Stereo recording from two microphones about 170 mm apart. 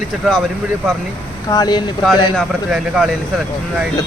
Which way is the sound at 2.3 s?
Centre (ahead or behind).